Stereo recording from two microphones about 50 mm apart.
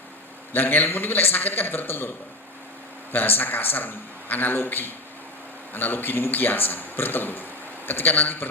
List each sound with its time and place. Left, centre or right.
0.5 s a man's voice: left
3.1 s a man's voice: left